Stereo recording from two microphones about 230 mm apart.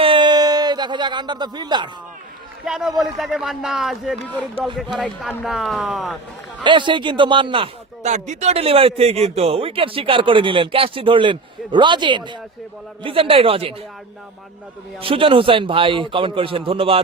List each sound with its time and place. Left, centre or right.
0.0 s a sound: right
2.6 s speech: centre
6.7 s a man's voice: right
15.0 s a man's voice: right